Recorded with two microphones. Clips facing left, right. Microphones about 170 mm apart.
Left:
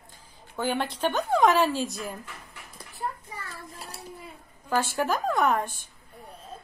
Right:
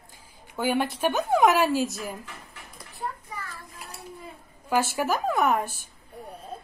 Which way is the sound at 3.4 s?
30° left (ahead or behind).